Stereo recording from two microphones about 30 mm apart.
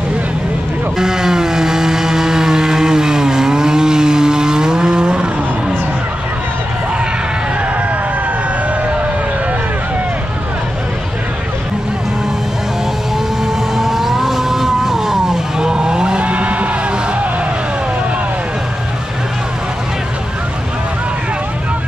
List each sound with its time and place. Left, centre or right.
0.9 s vehicle: centre
13.7 s vehicle: centre; by 16.3 s right
16.3 s music: right